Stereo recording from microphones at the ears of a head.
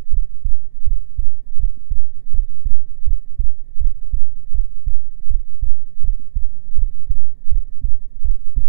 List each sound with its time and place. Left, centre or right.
0.1 s heart sounds: right